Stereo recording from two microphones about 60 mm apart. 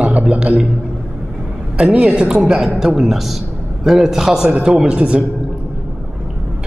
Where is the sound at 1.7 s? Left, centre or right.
Centre.